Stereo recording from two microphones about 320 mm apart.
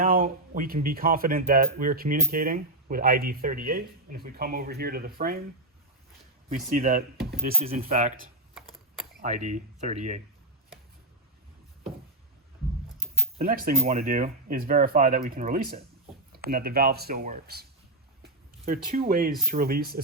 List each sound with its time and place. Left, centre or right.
0.0 s speech: right
6.5 s speech: right
9.2 s speech: right
13.4 s speech: right
18.2 s a sound: right
19.5 s speech: right